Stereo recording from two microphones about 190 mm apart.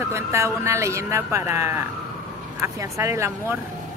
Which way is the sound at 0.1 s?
15° right (ahead or behind).